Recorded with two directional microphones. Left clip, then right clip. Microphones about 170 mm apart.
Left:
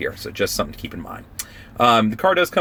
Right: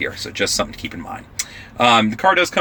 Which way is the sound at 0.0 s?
20° left (ahead or behind).